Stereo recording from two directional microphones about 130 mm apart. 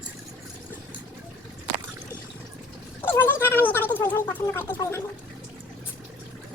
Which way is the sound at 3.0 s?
15° left (ahead or behind).